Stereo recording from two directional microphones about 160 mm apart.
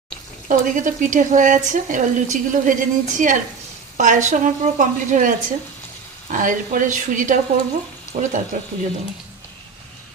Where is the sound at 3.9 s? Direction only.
50° right (ahead or behind).